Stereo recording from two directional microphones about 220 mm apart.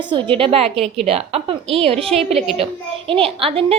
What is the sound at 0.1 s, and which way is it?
A woman's voice, 25° right (ahead or behind).